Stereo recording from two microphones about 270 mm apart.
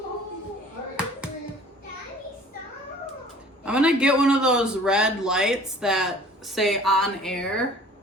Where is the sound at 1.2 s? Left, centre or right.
Centre.